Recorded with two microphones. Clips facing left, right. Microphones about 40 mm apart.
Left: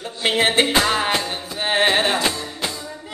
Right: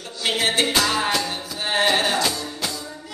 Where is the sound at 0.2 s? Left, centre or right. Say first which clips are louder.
Left 3 dB; left.